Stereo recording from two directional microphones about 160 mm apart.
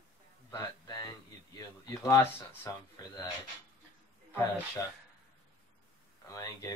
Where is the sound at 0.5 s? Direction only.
20° left (ahead or behind).